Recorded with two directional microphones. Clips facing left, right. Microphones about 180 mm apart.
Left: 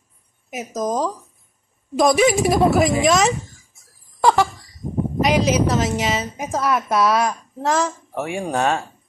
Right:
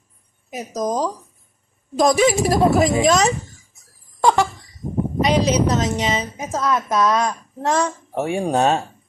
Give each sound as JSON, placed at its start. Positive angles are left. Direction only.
{"t": 0.5, "sound": "a woman's voice", "side_deg": 0}
{"t": 4.2, "sound": "a sound", "side_deg": 5}
{"t": 5.2, "sound": "a woman's voice", "side_deg": 5}
{"t": 8.1, "sound": "speech", "side_deg": -25}